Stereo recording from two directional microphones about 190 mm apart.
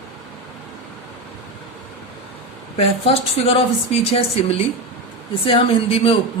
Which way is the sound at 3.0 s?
30° left (ahead or behind).